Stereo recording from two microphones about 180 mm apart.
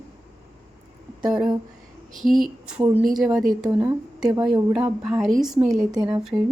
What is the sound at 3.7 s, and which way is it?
A woman's voice, 15° right (ahead or behind).